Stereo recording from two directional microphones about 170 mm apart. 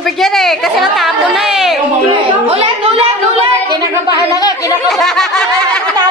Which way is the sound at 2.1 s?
35° right (ahead or behind).